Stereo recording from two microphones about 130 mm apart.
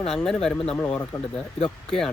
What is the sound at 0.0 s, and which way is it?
Speech, 5° left (ahead or behind).